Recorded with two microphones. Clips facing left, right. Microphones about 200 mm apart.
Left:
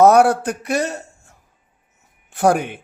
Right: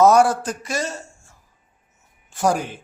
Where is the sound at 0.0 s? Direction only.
60° left (ahead or behind).